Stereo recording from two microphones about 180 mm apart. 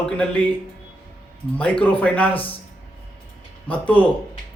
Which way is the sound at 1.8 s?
5° left (ahead or behind).